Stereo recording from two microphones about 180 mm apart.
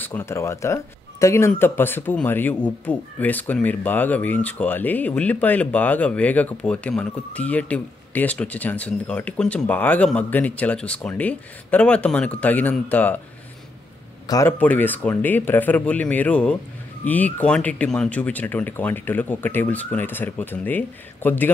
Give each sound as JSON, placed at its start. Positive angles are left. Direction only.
{"t": 0.0, "sound": "speech", "side_deg": 10}
{"t": 14.2, "sound": "a man's voice", "side_deg": 20}
{"t": 14.6, "sound": "speech", "side_deg": 10}